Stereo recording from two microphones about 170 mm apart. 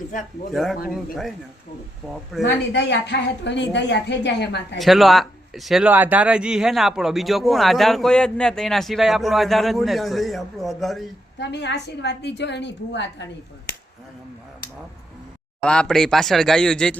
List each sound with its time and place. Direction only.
0.5 s speech: centre (ahead or behind)
2.4 s a woman's voice: 90° left
4.8 s speech: centre (ahead or behind)
11.3 s a woman's voice: 90° left
15.6 s speech: 5° left (ahead or behind)